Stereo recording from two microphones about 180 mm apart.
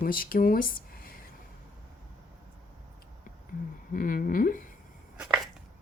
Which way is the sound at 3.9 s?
50° left (ahead or behind).